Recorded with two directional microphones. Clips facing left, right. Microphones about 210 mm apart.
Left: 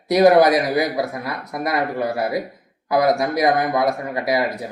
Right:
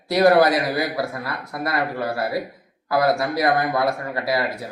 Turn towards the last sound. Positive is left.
turn(degrees=20)  # may be behind; listen again after turning